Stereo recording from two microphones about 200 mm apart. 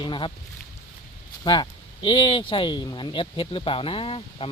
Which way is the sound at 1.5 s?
25° left (ahead or behind).